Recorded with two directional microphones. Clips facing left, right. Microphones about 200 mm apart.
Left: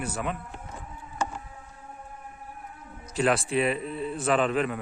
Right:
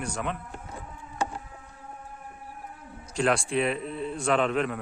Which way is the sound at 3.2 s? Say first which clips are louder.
Left 1 dB; 5° left (ahead or behind).